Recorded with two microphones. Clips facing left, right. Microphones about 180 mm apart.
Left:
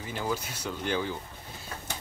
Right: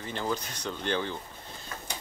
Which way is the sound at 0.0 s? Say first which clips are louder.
Even; 10° left (ahead or behind).